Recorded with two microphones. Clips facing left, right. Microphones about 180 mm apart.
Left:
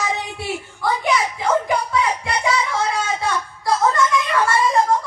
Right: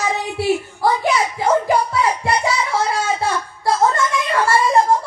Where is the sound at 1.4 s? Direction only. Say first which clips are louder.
Right 3 dB; 30° right (ahead or behind).